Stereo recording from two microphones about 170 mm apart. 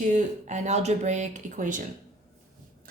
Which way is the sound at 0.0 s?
45° right (ahead or behind).